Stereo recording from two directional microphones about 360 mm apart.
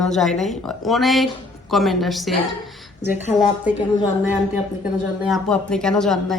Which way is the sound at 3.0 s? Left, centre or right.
Left.